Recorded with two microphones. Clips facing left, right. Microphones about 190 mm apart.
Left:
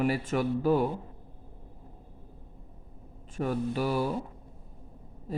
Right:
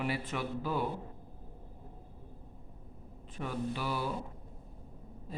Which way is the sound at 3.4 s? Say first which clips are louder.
Left 7 dB; 45° left (ahead or behind).